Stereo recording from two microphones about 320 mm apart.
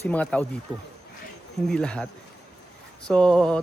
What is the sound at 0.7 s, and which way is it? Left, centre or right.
Speech, centre.